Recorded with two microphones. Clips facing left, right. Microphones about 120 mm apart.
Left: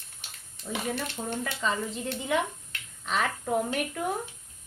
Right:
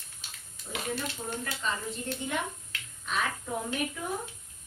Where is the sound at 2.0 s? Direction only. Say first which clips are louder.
Left 5 dB; 90° left.